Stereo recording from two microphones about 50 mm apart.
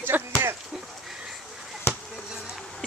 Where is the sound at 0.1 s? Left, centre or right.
Right.